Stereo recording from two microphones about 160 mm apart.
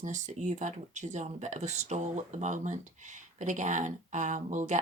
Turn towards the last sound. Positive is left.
turn(degrees=-50)  # may be behind; listen again after turning